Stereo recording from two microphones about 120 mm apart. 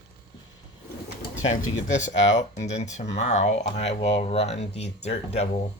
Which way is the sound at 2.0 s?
85° left.